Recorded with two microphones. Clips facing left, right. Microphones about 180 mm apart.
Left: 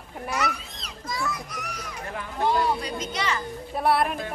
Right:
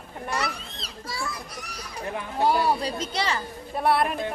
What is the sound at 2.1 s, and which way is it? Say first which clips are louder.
Speech: right 2 dB; 30° right (ahead or behind).